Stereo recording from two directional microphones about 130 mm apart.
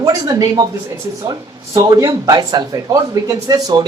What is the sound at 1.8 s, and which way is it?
Speech, 30° right (ahead or behind).